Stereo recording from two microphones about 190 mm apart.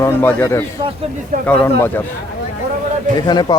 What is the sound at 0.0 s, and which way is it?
Speech, 10° left (ahead or behind).